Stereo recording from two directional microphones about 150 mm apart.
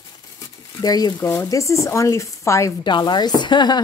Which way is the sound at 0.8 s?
25° left (ahead or behind).